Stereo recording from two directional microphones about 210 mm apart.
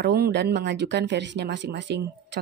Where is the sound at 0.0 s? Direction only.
50° right (ahead or behind).